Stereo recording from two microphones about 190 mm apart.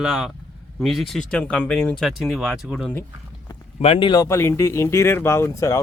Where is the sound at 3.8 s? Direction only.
30° left (ahead or behind).